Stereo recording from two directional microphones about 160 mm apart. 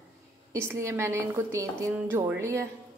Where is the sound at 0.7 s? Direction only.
15° right (ahead or behind).